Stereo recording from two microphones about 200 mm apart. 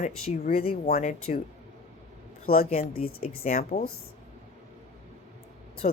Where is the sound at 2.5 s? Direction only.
50° left (ahead or behind).